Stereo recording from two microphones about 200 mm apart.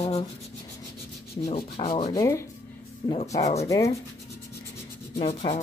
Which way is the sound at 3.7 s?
15° left (ahead or behind).